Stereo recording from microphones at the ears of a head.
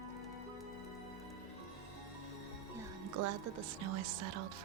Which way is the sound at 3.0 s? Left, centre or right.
Right.